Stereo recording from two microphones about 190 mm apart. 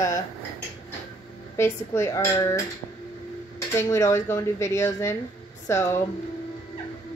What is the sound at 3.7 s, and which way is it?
Speech, 15° left (ahead or behind).